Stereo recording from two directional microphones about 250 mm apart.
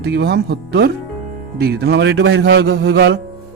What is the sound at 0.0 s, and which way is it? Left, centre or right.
A man's voice, right.